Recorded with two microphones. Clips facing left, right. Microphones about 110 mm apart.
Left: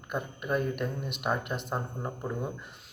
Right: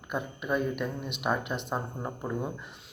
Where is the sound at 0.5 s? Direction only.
45° left (ahead or behind).